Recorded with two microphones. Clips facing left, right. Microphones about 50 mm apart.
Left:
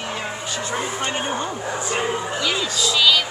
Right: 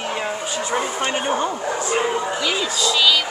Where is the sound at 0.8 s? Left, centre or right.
Centre.